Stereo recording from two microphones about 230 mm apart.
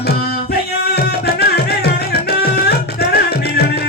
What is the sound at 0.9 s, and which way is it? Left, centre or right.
Music, left.